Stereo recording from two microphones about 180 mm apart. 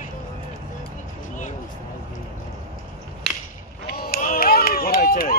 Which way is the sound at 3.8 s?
55° left (ahead or behind).